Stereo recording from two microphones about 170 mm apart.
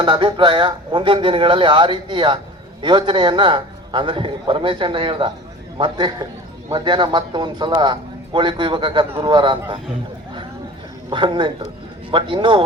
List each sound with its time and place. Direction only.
0.0 s a man's voice: 30° right (ahead or behind)
11.1 s a man's voice: 30° right (ahead or behind)